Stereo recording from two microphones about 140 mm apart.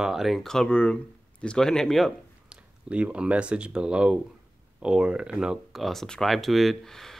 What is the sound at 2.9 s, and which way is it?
Speech, 10° right (ahead or behind).